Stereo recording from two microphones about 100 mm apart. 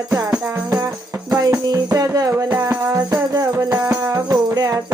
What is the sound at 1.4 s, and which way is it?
Music, 40° right (ahead or behind).